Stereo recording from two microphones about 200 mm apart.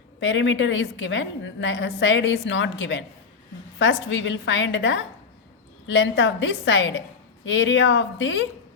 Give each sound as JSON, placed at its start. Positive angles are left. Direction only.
{"t": 0.2, "sound": "a woman's voice", "side_deg": 70}